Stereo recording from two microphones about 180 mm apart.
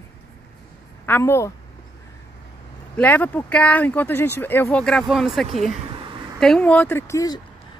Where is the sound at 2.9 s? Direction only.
10° left (ahead or behind).